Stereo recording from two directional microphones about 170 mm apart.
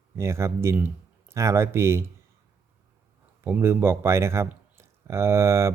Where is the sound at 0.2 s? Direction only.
15° right (ahead or behind).